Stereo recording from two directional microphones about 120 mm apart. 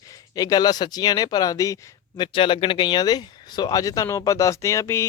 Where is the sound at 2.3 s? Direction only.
45° left (ahead or behind).